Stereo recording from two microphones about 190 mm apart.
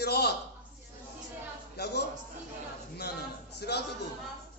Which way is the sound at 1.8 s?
60° left (ahead or behind).